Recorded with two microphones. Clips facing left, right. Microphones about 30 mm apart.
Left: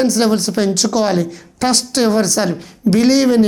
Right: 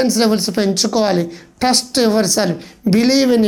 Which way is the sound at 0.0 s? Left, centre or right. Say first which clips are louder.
Even; centre.